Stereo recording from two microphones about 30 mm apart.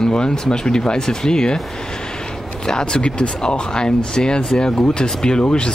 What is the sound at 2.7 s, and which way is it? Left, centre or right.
Speech, left.